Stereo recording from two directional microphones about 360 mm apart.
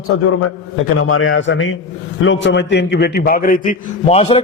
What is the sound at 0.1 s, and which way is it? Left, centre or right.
A man's voice, left.